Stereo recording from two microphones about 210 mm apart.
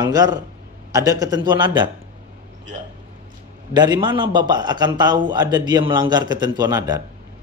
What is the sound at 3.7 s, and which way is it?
A man's voice, 20° right (ahead or behind).